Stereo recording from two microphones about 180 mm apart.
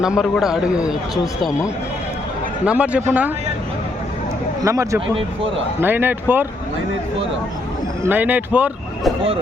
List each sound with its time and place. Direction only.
0.0 s a man's voice: centre (ahead or behind)
2.6 s speech: 5° right (ahead or behind)
4.6 s speech: 15° right (ahead or behind)
8.0 s speech: 10° right (ahead or behind)